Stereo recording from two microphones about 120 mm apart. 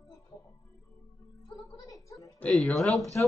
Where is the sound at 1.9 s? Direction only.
25° left (ahead or behind).